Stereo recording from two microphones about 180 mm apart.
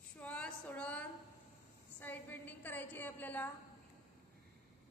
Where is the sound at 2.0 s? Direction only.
10° left (ahead or behind).